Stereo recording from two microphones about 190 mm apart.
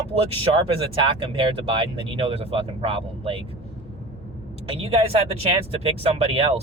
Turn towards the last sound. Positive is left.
turn(degrees=-30)  # may be behind; listen again after turning